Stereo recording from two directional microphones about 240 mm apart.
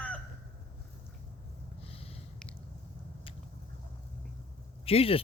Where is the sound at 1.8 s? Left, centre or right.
Left.